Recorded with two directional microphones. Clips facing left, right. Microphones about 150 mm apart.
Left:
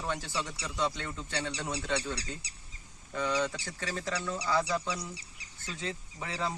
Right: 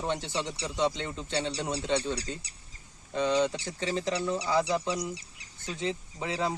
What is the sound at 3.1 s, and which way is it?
A man's voice, 20° right (ahead or behind).